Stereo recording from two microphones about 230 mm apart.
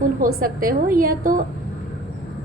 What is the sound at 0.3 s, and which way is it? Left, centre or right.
A woman's voice, right.